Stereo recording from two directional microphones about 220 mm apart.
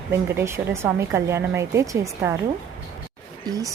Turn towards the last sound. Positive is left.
turn(degrees=-15)  # may be behind; listen again after turning